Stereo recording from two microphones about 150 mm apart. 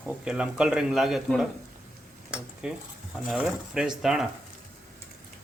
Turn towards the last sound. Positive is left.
turn(degrees=-5)  # may be behind; listen again after turning